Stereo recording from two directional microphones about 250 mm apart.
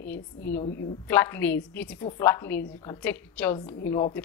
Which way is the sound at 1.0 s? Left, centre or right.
Centre.